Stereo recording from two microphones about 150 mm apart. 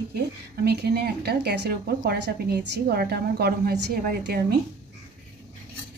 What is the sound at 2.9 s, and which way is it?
A woman's voice, 90° right.